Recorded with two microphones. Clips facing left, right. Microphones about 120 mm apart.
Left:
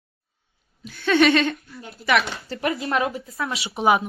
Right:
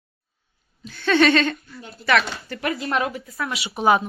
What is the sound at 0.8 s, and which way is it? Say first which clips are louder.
Speech: even; 5° left (ahead or behind).